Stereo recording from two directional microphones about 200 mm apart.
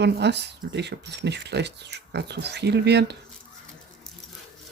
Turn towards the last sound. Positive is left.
turn(degrees=-55)  # may be behind; listen again after turning